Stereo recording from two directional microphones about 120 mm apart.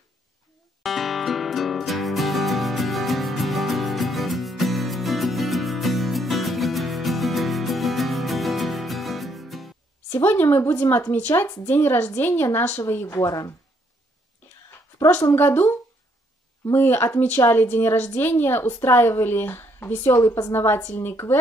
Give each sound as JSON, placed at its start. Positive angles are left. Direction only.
{"t": 0.8, "sound": "music", "side_deg": 0}
{"t": 10.0, "sound": "a woman's voice", "side_deg": 20}
{"t": 15.1, "sound": "a woman's voice", "side_deg": 20}
{"t": 16.7, "sound": "a woman's voice", "side_deg": 20}